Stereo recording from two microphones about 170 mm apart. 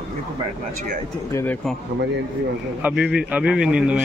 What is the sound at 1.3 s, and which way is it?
Speech, 10° left (ahead or behind).